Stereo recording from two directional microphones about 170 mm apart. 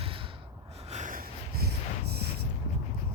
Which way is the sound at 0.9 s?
50° right (ahead or behind).